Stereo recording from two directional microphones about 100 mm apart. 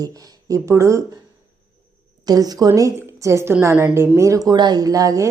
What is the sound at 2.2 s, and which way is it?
A woman's voice, 40° right (ahead or behind).